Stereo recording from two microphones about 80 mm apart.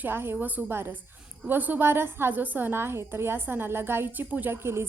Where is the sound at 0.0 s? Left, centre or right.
Right.